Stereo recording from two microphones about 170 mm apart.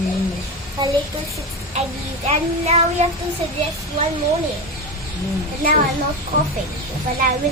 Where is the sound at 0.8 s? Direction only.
25° right (ahead or behind).